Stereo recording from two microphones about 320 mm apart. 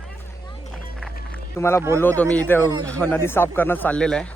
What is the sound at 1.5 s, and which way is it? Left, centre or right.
Speech, centre.